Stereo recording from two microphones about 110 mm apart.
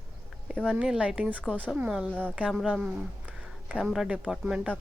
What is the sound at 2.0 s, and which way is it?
Speech, 10° left (ahead or behind).